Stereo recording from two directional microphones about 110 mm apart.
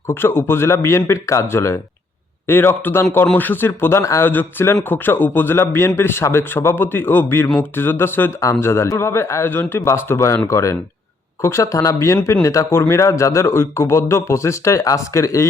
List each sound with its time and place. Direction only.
0.1 s speech: 20° left (ahead or behind)